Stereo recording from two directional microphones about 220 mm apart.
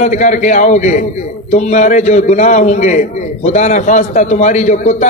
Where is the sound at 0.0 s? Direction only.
35° left (ahead or behind).